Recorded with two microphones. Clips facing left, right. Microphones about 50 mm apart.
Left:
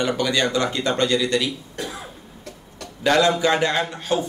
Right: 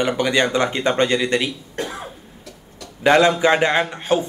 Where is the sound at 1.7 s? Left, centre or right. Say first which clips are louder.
Right 4 dB; right.